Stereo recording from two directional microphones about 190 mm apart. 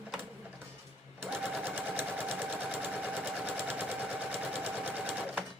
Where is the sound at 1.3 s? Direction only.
10° right (ahead or behind).